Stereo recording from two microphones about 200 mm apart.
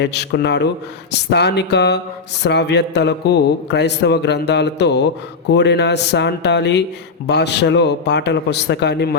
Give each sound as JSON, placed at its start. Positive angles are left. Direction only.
{"t": 0.0, "sound": "speech", "side_deg": 55}